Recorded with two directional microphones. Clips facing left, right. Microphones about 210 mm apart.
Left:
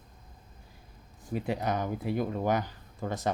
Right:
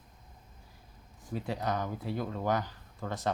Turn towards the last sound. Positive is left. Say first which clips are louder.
# left 3 dB
turn(degrees=20)  # may be behind; listen again after turning